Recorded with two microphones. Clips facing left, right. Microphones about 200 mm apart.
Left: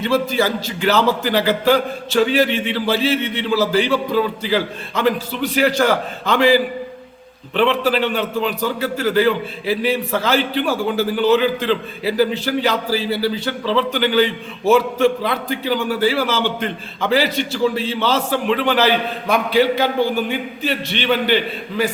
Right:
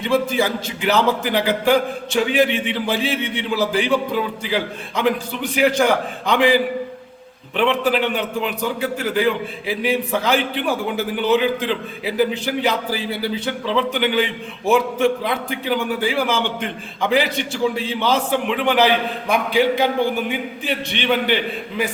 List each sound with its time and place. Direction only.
0.1 s speech: 15° right (ahead or behind)
20.3 s speech: 15° right (ahead or behind)